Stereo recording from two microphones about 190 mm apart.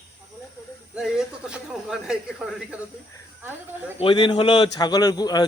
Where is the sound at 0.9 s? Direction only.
5° right (ahead or behind).